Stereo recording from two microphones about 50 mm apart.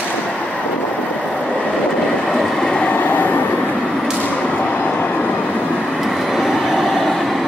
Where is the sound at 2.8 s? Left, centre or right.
Left.